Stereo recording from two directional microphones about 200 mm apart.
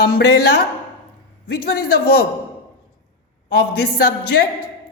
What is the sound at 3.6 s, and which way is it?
Speech, 50° left (ahead or behind).